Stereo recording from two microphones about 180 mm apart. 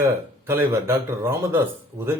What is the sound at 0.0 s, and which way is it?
Speech, 10° right (ahead or behind).